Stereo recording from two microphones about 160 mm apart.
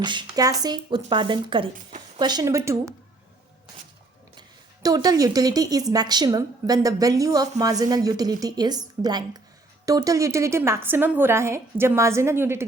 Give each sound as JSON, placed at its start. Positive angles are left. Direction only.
{"t": 0.0, "sound": "speech", "side_deg": -30}
{"t": 4.4, "sound": "a woman's voice", "side_deg": -25}